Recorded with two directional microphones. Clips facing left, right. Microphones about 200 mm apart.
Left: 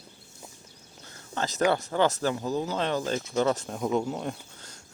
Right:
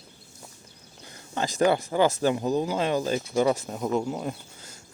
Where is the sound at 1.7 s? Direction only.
10° right (ahead or behind).